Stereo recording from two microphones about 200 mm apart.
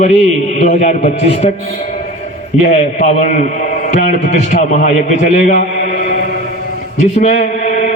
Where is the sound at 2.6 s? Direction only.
35° left (ahead or behind).